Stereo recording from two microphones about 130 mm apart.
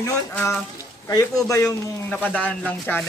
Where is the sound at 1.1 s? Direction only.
25° left (ahead or behind).